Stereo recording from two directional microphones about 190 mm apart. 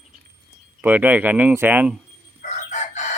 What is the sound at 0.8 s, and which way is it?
Speech, 10° right (ahead or behind).